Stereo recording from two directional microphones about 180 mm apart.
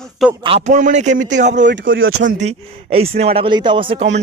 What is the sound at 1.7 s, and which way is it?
Speech, 90° right.